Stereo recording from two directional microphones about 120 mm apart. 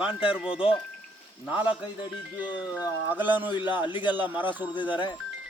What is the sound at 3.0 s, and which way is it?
Speech, 15° right (ahead or behind).